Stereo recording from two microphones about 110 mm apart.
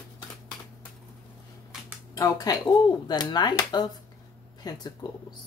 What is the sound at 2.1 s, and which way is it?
Speech, 35° left (ahead or behind).